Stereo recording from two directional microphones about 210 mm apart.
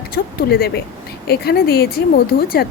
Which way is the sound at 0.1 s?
45° left (ahead or behind).